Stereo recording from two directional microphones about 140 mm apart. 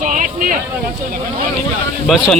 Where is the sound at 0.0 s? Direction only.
65° right (ahead or behind).